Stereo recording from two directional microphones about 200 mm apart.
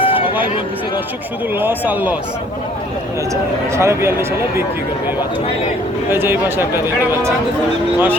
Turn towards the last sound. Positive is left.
turn(degrees=-10)  # may be behind; listen again after turning